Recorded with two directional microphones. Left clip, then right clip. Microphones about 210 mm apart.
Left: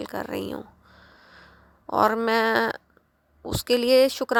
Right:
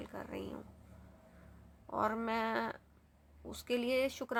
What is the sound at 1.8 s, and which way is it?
A woman's voice, 50° left (ahead or behind).